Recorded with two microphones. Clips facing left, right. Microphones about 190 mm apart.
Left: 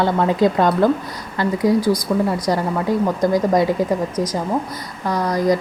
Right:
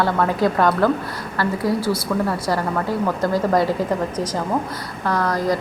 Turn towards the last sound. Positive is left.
turn(degrees=15)  # may be behind; listen again after turning